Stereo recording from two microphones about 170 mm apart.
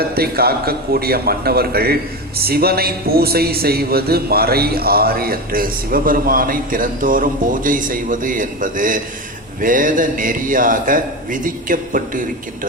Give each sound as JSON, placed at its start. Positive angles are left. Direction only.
{"t": 0.2, "sound": "a man's voice", "side_deg": -65}